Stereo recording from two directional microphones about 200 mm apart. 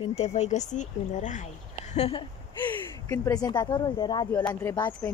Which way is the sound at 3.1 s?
15° left (ahead or behind).